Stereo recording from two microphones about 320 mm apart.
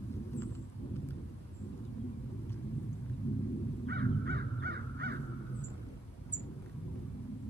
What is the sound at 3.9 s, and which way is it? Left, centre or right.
Crow, right.